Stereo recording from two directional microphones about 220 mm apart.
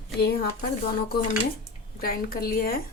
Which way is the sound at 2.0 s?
45° left (ahead or behind).